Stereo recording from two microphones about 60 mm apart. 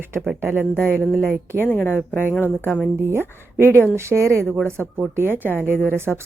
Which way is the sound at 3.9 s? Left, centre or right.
Right.